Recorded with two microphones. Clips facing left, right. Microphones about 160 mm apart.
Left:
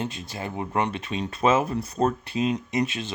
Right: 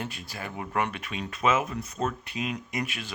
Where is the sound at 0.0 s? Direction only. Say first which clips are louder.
Left 5 dB; 20° left (ahead or behind).